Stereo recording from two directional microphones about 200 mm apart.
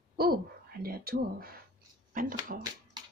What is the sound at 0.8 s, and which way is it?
Speech, 50° right (ahead or behind).